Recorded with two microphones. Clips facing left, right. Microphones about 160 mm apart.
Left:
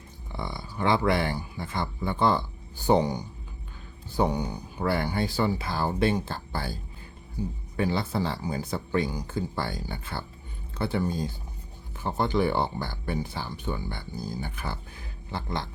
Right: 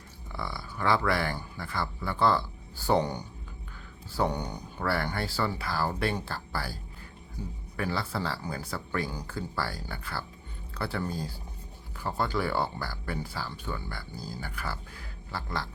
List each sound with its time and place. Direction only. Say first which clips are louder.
0.3 s speech: left 3 dB; 20° left (ahead or behind)
7.8 s speech: left 5 dB; 20° left (ahead or behind)